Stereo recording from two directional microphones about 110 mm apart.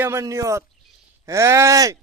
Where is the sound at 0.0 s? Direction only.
25° right (ahead or behind).